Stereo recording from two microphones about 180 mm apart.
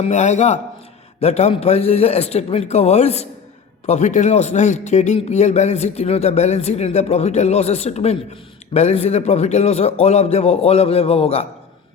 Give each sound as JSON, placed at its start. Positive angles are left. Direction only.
{"t": 0.0, "sound": "a man's voice", "side_deg": 40}